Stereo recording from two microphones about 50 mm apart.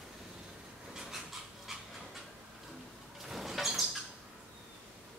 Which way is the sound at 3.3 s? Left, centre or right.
Centre.